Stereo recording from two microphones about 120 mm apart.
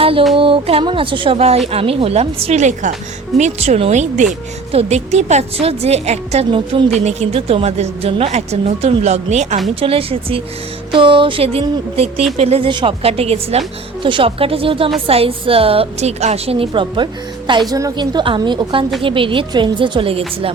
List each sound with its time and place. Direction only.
0.0 s music: 50° right (ahead or behind)
0.3 s a woman's voice: 45° right (ahead or behind); by 4.3 s 75° right (ahead or behind)
4.7 s a woman's voice: 60° right (ahead or behind)
9.8 s a woman's voice: 50° right (ahead or behind)
14.0 s a woman's voice: 45° right (ahead or behind)
17.7 s a woman's voice: 30° right (ahead or behind); by 20.5 s 50° right (ahead or behind)